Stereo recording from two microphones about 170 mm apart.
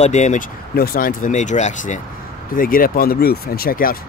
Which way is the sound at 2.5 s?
55° left (ahead or behind).